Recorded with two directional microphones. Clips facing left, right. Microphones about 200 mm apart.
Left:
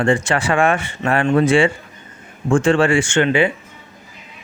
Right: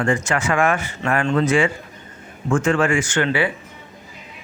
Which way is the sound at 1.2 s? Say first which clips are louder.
Left 5 dB; 15° left (ahead or behind).